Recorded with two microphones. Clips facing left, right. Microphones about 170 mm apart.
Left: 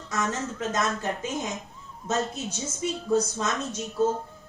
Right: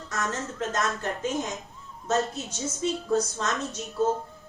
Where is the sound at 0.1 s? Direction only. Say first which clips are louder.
Left 2 dB; 20° left (ahead or behind).